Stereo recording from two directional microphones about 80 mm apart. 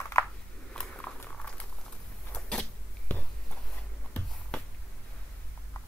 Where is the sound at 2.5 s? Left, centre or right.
Centre.